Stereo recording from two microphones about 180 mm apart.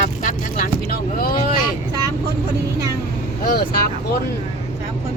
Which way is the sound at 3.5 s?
55° left (ahead or behind).